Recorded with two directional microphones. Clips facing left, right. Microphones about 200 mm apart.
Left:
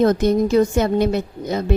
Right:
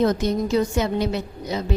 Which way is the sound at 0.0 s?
55° left (ahead or behind).